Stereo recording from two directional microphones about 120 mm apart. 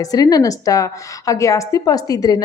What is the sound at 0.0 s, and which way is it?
A woman's voice, 30° left (ahead or behind).